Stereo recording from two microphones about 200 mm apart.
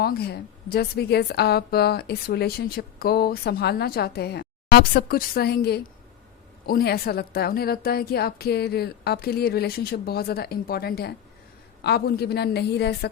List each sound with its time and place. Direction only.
0.0 s a woman's voice: 50° left (ahead or behind)